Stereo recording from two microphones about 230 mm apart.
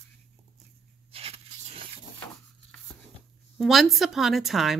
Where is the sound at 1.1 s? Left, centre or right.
Right.